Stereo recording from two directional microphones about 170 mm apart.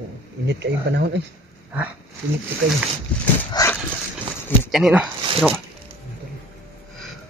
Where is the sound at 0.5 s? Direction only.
85° right.